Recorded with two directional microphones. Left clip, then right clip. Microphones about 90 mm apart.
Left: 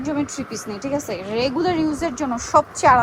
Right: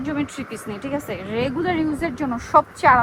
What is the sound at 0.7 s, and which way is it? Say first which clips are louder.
Speech: left 2 dB; 60° left (ahead or behind).